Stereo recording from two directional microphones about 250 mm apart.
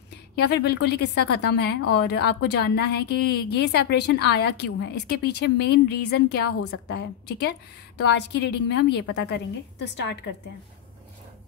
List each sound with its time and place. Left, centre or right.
0.1 s a woman's voice: left